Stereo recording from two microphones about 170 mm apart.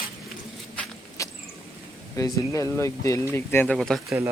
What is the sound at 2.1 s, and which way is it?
Speech, 20° left (ahead or behind).